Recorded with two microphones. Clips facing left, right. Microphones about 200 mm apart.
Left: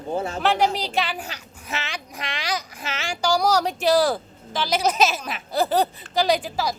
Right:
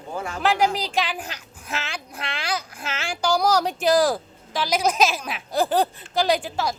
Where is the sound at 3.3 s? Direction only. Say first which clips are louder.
Even; 10° left (ahead or behind).